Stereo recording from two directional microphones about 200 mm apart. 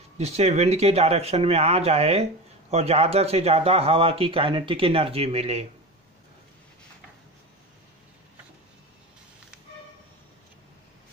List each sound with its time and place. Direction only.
0.2 s speech: 35° right (ahead or behind)